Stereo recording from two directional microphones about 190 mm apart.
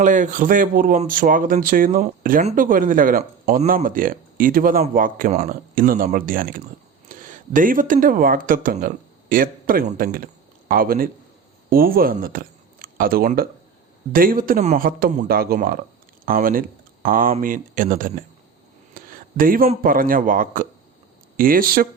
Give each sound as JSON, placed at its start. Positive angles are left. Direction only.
{"t": 0.0, "sound": "speech", "side_deg": -40}
{"t": 18.9, "sound": "a sound", "side_deg": -45}
{"t": 19.8, "sound": "speech", "side_deg": -50}